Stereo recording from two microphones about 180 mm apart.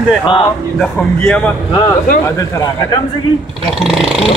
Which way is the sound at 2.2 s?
20° left (ahead or behind).